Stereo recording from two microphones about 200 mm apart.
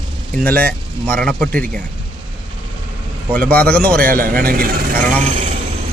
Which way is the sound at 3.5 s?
5° left (ahead or behind).